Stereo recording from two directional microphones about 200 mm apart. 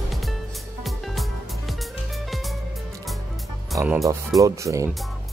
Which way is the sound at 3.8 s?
10° right (ahead or behind).